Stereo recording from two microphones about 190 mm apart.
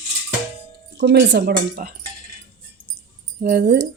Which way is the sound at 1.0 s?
65° right (ahead or behind).